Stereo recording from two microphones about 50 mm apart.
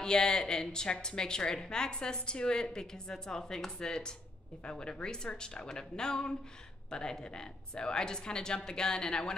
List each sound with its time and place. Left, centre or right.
0.0 s a woman's voice: centre